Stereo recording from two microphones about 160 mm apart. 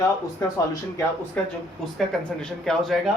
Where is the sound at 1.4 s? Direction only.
10° left (ahead or behind).